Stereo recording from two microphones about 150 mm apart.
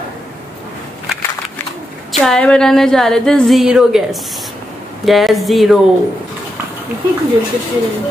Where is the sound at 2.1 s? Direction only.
5° left (ahead or behind).